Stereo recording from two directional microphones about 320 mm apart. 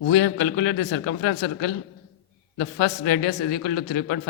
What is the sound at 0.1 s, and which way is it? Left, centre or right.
Speech, left.